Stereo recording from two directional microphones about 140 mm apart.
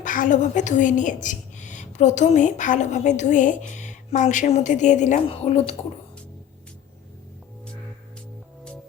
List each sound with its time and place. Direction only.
0.0 s a woman's voice: 70° left (ahead or behind)
5.2 s speech: 45° left (ahead or behind)